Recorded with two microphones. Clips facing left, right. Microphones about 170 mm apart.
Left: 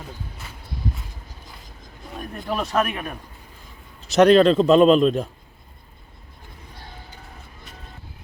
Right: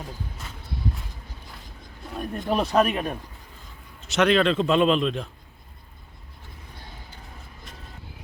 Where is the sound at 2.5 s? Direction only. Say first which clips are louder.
Right 2 dB; 25° right (ahead or behind).